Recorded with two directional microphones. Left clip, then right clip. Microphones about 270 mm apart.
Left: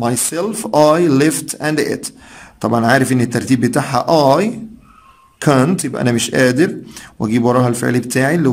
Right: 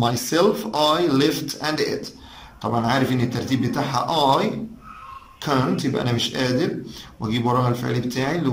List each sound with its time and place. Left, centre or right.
0.0 s a man's voice: left